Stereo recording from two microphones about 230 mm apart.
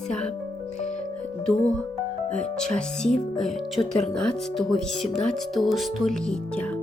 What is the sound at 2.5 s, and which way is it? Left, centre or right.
Speech, centre.